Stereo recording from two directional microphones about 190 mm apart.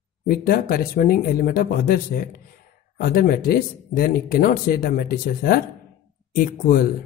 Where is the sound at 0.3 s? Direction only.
50° left (ahead or behind).